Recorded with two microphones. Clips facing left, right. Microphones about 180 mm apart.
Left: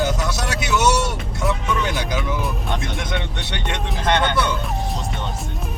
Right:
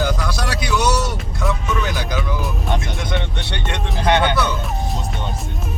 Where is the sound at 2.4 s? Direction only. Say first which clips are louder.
Right 2 dB; centre (ahead or behind).